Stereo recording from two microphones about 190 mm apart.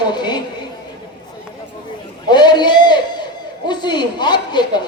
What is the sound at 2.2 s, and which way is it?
A man's voice, 25° left (ahead or behind).